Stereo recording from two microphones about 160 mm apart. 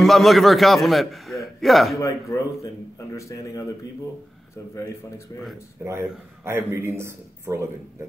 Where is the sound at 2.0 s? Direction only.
20° left (ahead or behind).